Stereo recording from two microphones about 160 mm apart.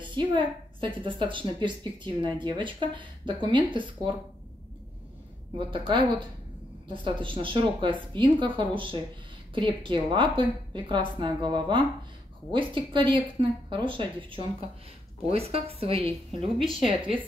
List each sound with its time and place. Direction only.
0.0 s a woman's voice: 30° right (ahead or behind)
5.6 s a woman's voice: 30° right (ahead or behind)
7.2 s a woman's voice: 30° right (ahead or behind)